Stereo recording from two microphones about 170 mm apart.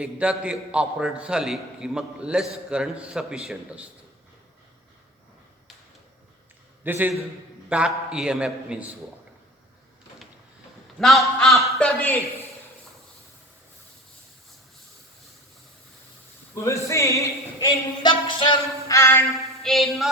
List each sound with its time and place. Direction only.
0.0 s a man's voice: 5° right (ahead or behind)
6.8 s a man's voice: 10° right (ahead or behind)
11.0 s a man's voice: centre (ahead or behind)
16.6 s speech: 15° left (ahead or behind)
18.9 s speech: 15° left (ahead or behind)
19.6 s a man's voice: centre (ahead or behind)